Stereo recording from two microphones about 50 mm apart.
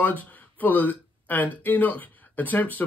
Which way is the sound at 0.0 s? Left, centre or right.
Left.